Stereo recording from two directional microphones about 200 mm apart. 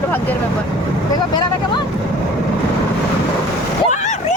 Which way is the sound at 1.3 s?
20° left (ahead or behind).